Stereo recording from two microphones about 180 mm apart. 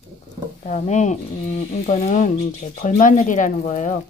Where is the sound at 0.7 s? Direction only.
40° left (ahead or behind).